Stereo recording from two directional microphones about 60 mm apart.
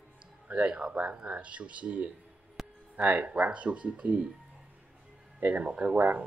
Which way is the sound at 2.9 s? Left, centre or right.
Right.